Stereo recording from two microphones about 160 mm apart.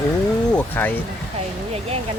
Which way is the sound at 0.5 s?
10° left (ahead or behind).